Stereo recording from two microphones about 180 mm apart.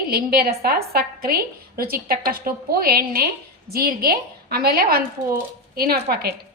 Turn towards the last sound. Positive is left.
turn(degrees=-60)  # may be behind; listen again after turning